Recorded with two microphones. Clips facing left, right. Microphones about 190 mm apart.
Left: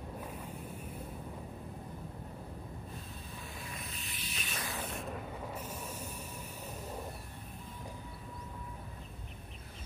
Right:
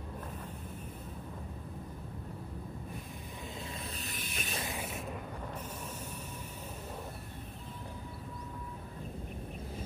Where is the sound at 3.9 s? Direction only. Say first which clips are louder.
Right 4 dB; 40° right (ahead or behind).